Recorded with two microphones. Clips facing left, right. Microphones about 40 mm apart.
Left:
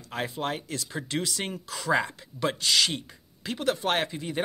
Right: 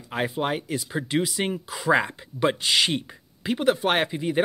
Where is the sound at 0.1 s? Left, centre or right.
Centre.